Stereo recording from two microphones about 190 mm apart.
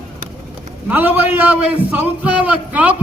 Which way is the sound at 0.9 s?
10° right (ahead or behind).